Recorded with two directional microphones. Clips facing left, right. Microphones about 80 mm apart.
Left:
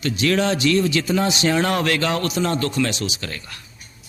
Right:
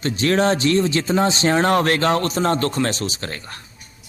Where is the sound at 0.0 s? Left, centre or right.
Right.